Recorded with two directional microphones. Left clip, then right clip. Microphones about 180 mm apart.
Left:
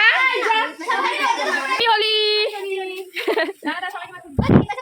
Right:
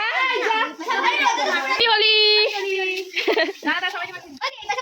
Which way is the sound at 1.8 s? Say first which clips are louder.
Right 2 dB; centre (ahead or behind).